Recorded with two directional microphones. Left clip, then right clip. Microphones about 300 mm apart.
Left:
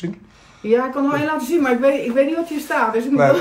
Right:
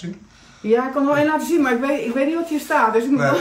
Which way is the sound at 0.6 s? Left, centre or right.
Centre.